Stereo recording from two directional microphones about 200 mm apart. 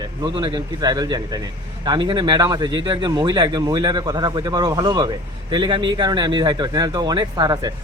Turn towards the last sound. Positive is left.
turn(degrees=-20)  # may be behind; listen again after turning